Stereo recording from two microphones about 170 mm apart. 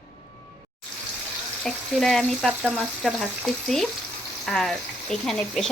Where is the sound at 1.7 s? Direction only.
Centre (ahead or behind).